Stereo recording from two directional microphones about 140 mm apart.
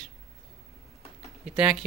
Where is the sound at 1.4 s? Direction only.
5° right (ahead or behind).